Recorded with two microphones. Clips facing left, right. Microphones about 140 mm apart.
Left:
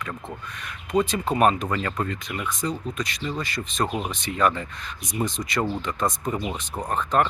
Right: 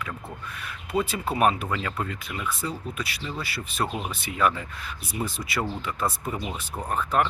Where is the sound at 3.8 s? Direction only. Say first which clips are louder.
Left 3 dB; 15° left (ahead or behind).